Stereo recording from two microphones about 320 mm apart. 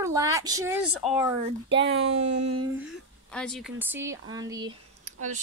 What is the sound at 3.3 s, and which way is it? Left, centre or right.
Speech, centre.